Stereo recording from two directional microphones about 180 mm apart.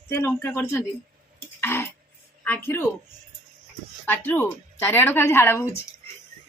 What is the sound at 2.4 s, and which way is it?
Speech, 10° left (ahead or behind).